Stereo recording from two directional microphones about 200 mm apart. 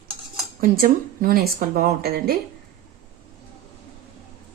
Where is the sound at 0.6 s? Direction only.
45° right (ahead or behind).